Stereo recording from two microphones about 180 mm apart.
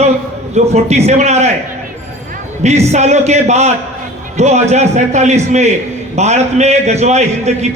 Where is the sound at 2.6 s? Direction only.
40° right (ahead or behind).